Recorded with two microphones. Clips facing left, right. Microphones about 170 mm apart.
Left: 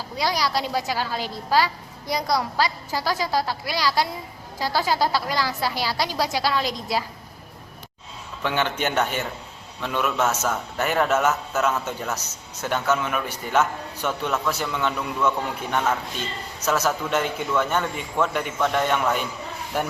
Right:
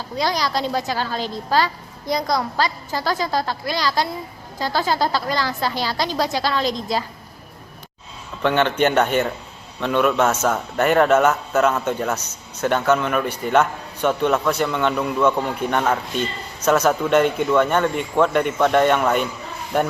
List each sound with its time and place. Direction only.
0.2 s a woman's voice: 5° left (ahead or behind)
8.4 s a man's voice: 60° right (ahead or behind)
16.6 s a man's voice: 60° right (ahead or behind)